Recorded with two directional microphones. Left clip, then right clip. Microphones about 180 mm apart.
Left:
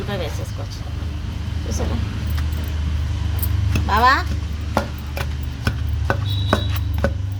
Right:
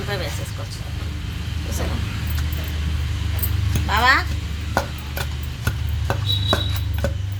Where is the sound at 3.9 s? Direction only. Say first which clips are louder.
Left 1 dB; 50° left (ahead or behind).